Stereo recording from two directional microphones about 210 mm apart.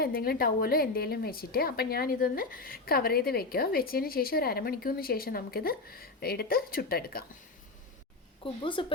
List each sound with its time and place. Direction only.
0.0 s a woman's voice: 45° left (ahead or behind)
8.6 s speech: 25° left (ahead or behind)